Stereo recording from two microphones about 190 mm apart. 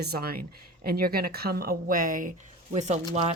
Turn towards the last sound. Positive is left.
turn(degrees=-35)  # may be behind; listen again after turning